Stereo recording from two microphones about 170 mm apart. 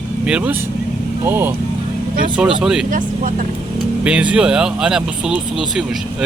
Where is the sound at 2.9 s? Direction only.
50° right (ahead or behind).